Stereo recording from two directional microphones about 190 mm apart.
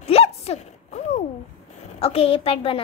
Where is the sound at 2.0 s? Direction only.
30° left (ahead or behind).